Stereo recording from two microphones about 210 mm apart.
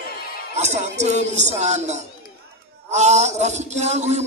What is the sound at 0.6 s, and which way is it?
A man's voice, 35° right (ahead or behind).